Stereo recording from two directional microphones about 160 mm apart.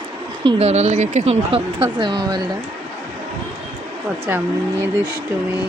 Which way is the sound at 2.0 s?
25° right (ahead or behind).